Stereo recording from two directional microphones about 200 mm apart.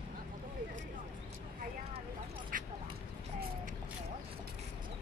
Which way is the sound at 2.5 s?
45° right (ahead or behind).